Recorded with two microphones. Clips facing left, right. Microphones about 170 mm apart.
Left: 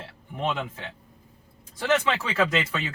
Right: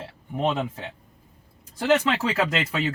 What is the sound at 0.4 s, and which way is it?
Speech, 35° right (ahead or behind).